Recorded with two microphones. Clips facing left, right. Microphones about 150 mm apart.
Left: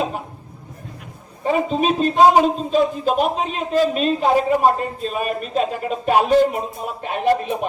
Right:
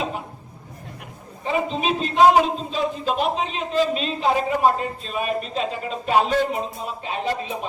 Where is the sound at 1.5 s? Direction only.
45° left (ahead or behind).